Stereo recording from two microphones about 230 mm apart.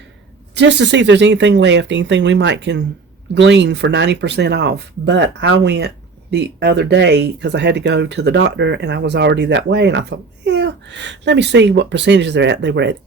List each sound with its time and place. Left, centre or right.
0.5 s speech: right